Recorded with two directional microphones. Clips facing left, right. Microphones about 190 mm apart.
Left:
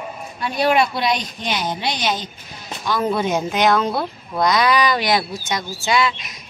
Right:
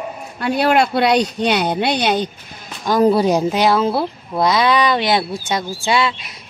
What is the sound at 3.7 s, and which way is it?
Speech, 5° right (ahead or behind).